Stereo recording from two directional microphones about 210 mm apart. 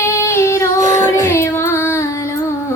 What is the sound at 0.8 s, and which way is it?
Child singing, 35° right (ahead or behind).